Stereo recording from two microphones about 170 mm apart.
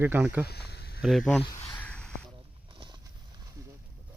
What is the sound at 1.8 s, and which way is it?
Mechanisms, 5° left (ahead or behind).